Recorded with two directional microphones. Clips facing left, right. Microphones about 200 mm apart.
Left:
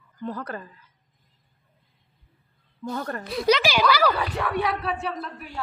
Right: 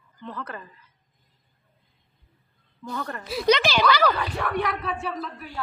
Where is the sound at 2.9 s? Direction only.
40° left (ahead or behind).